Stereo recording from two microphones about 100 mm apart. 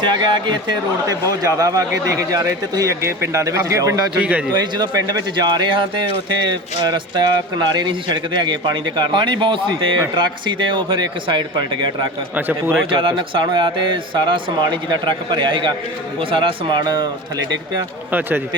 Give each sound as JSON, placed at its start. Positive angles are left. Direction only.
{"t": 0.0, "sound": "speech", "side_deg": -50}
{"t": 1.4, "sound": "speech", "side_deg": -35}
{"t": 4.2, "sound": "a man's voice", "side_deg": -15}
{"t": 4.5, "sound": "speech", "side_deg": -45}
{"t": 12.5, "sound": "a man's voice", "side_deg": -20}
{"t": 12.9, "sound": "speech", "side_deg": -60}
{"t": 18.1, "sound": "a man's voice", "side_deg": -20}